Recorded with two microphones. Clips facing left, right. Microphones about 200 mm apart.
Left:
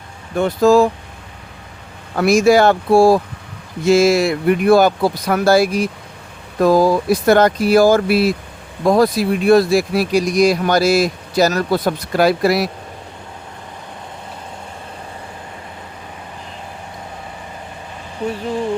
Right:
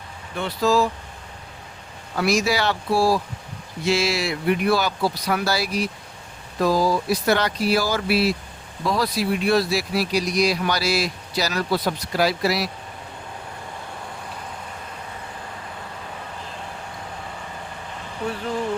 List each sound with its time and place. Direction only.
0.3 s speech: 50° left (ahead or behind)
2.1 s speech: 50° left (ahead or behind)